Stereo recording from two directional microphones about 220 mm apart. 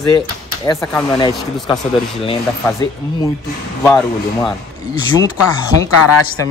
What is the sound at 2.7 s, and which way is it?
Speech, 15° left (ahead or behind).